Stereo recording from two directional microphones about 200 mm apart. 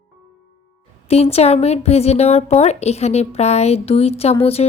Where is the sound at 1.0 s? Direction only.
30° left (ahead or behind).